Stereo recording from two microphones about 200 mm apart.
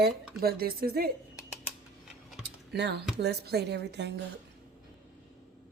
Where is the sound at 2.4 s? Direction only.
60° right (ahead or behind).